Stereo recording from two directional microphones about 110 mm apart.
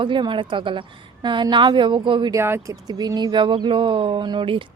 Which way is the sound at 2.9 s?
35° right (ahead or behind).